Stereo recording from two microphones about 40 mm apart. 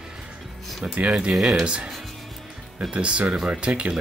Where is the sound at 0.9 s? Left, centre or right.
Right.